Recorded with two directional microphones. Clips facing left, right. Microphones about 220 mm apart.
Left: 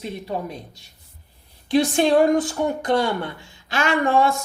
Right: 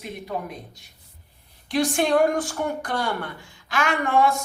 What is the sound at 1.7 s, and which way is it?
Speech, 25° left (ahead or behind).